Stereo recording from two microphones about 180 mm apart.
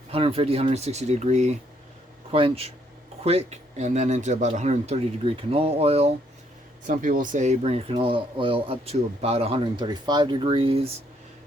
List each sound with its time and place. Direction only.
0.1 s speech: 30° right (ahead or behind)
6.8 s speech: 50° right (ahead or behind); by 10.9 s 30° right (ahead or behind)